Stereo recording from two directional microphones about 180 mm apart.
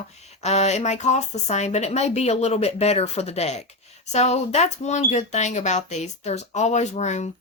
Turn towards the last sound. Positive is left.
turn(degrees=40)  # may be behind; listen again after turning